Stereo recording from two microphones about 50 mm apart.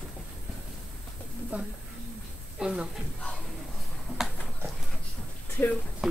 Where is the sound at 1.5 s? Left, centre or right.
Right.